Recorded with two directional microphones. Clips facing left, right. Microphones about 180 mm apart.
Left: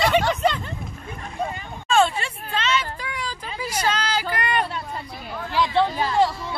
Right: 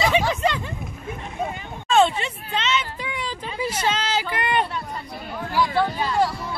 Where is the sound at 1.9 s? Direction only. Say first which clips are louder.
Right 1 dB; 25° right (ahead or behind).